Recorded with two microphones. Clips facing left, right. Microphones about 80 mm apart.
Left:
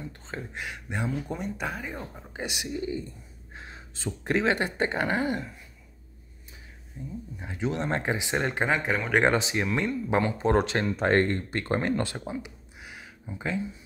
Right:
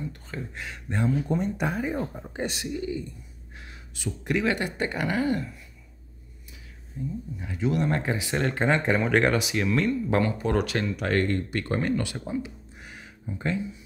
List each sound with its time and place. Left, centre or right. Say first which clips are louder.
0.3 s speech: even; centre
1.3 s speech: right 6 dB; centre
2.3 s speech: right 3 dB; centre
2.7 s a man's voice: right 1 dB; left
7.0 s speech: right 5 dB; left
8.6 s speech: right 3 dB; centre
9.1 s speech: even; left
12.8 s a sound: right 3 dB; centre